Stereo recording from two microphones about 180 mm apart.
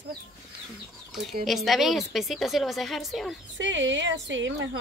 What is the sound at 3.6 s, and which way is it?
A woman's voice, 90° right.